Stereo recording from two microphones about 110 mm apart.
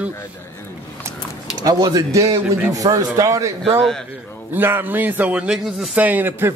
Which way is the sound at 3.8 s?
5° left (ahead or behind).